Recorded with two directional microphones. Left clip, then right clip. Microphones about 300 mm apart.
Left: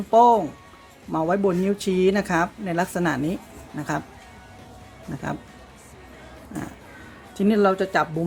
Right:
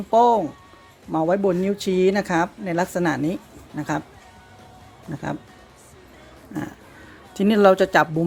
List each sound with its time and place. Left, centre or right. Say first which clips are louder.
0.1 s speech: left 1 dB; centre
7.3 s speech: right 4 dB; right